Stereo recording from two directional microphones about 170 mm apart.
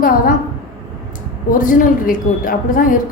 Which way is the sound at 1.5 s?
50° left (ahead or behind).